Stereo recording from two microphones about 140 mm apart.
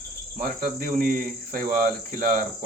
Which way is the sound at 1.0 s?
85° right.